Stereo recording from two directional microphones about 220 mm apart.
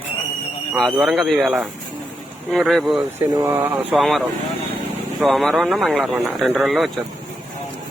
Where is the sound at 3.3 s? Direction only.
10° right (ahead or behind).